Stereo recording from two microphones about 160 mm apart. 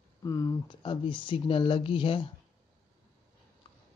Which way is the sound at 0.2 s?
20° left (ahead or behind).